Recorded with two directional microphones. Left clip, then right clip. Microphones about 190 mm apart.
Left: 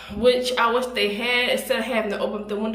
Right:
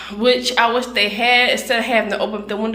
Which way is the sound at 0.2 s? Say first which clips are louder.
Right 4 dB; 10° left (ahead or behind).